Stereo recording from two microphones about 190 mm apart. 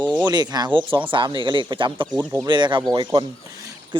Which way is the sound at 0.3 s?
20° right (ahead or behind).